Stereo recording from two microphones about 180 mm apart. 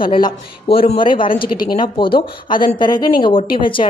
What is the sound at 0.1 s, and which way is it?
Speech, 30° left (ahead or behind).